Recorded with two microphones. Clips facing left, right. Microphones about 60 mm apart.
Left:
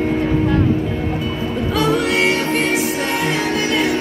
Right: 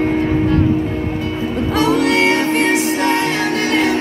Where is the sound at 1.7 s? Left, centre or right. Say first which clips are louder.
Right 3 dB; right.